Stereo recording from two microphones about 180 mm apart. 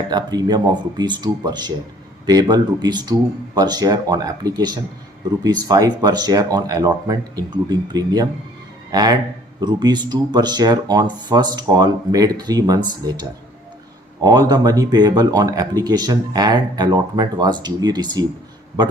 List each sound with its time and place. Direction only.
0.1 s speech: 25° right (ahead or behind)
14.2 s speech: 20° right (ahead or behind)